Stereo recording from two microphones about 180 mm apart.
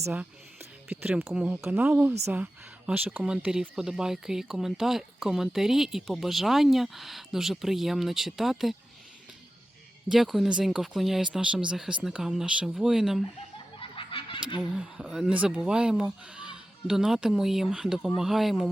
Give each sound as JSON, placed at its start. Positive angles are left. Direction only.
{"t": 0.0, "sound": "speech", "side_deg": -10}
{"t": 10.1, "sound": "speech", "side_deg": 0}
{"t": 13.7, "sound": "a sound", "side_deg": 30}
{"t": 14.6, "sound": "speech", "side_deg": -5}